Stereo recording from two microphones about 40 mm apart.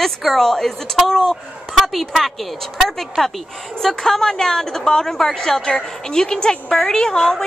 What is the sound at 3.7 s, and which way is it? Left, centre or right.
A woman's voice, centre.